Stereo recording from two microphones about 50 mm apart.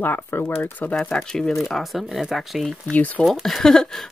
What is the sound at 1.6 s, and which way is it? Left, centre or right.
Speech, centre.